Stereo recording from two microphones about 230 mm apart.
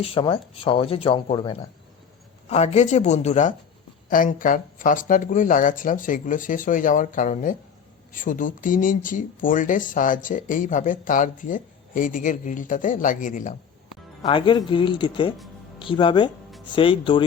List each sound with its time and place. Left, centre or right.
0.0 s speech: left
14.2 s speech: left